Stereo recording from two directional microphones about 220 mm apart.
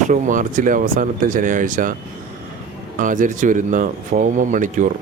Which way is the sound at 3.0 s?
35° right (ahead or behind).